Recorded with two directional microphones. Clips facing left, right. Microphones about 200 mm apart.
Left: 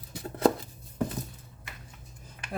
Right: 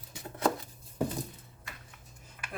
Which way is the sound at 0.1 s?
35° left (ahead or behind).